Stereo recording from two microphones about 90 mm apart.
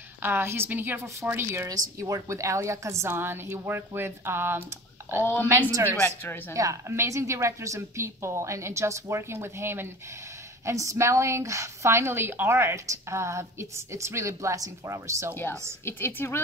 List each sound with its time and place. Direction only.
0.2 s a woman's voice: 25° right (ahead or behind)
1.7 s a woman's voice: 35° right (ahead or behind)
5.2 s a woman's voice: 25° left (ahead or behind)
5.7 s a woman's voice: 35° right (ahead or behind)
15.8 s a woman's voice: 25° left (ahead or behind)